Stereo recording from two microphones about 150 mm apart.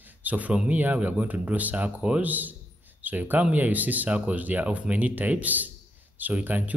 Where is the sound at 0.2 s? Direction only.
10° right (ahead or behind).